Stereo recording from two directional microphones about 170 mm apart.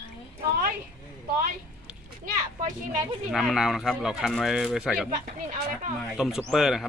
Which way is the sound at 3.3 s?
Centre (ahead or behind).